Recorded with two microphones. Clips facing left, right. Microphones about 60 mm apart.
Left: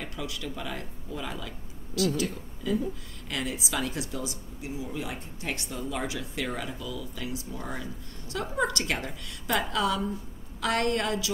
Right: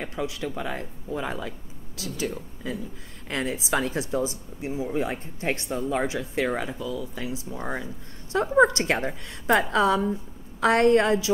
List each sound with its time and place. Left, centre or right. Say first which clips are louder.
0.0 s a woman's voice: right 6 dB; right
3.3 s a woman's voice: right 5 dB; right